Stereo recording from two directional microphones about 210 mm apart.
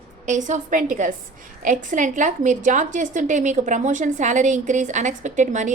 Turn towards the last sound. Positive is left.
turn(degrees=-35)  # may be behind; listen again after turning